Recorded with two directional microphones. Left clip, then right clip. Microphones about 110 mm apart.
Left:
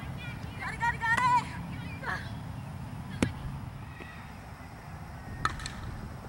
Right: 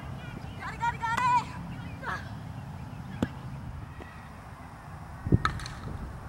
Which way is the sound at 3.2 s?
50° left (ahead or behind).